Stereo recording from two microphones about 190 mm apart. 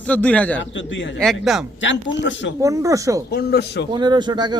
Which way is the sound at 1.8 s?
75° left (ahead or behind).